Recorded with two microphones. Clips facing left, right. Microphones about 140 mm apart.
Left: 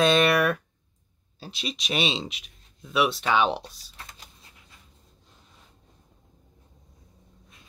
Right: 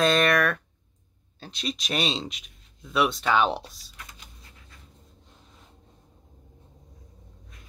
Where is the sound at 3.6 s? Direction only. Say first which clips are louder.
Left 1 dB; 30° left (ahead or behind).